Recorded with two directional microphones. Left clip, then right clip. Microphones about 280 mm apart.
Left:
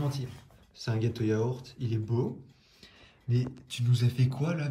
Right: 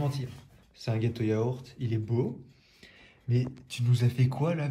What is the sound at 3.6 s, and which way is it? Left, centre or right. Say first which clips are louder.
Speech: right 1 dB; centre.